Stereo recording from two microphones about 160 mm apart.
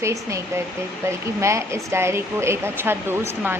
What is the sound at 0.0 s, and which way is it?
A woman's voice, 20° right (ahead or behind).